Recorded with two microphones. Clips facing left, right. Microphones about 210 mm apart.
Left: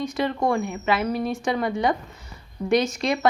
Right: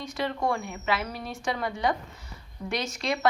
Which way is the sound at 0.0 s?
20° left (ahead or behind).